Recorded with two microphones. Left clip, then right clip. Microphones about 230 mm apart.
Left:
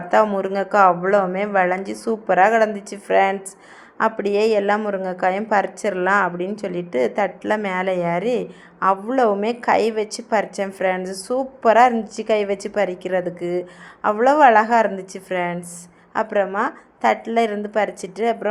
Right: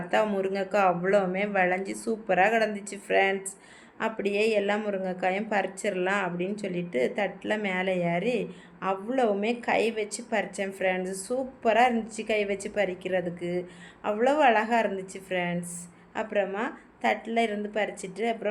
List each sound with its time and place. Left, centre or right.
0.1 s a woman's voice: centre